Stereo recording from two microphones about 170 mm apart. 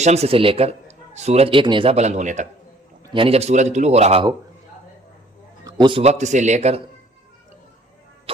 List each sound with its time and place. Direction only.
0.0 s a man's voice: 40° right (ahead or behind)
3.1 s a man's voice: 30° right (ahead or behind)
5.6 s a man's voice: 25° right (ahead or behind)